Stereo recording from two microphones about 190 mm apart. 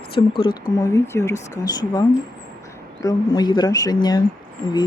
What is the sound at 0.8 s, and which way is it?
Speech, 15° left (ahead or behind).